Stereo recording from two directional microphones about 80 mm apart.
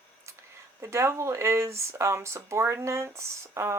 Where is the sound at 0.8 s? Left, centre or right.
Right.